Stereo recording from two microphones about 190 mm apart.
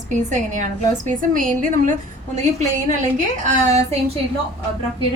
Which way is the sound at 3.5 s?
40° right (ahead or behind).